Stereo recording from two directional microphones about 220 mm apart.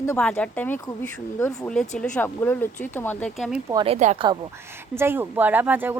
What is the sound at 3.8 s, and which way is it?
Speech, 30° right (ahead or behind).